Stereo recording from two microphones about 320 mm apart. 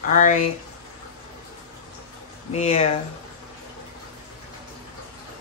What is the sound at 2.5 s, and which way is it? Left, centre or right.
Speech, left.